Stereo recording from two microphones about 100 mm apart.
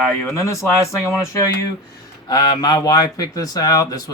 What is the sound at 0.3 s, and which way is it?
Speech, 30° left (ahead or behind).